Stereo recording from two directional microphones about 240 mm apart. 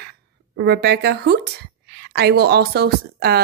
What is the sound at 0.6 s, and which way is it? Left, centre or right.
Speech, right.